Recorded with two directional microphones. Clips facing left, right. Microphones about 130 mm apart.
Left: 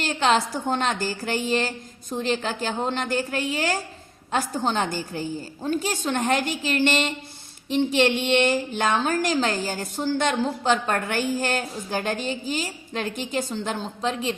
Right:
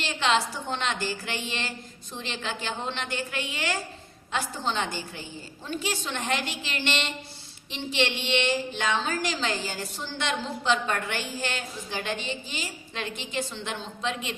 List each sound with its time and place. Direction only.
0.0 s a woman's voice: 45° left (ahead or behind)